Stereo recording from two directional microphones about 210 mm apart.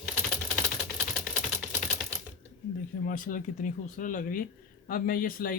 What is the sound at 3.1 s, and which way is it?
Speech, 40° left (ahead or behind).